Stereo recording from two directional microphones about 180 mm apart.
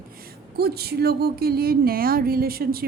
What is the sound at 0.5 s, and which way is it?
A woman's voice, 60° right (ahead or behind).